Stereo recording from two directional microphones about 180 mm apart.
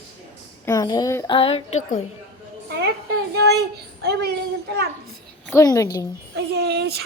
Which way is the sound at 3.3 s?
65° right (ahead or behind).